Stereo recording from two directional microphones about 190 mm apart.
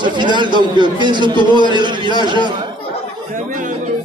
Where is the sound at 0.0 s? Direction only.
25° right (ahead or behind).